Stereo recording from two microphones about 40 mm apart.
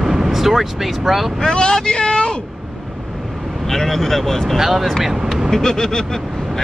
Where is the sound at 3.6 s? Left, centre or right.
Centre.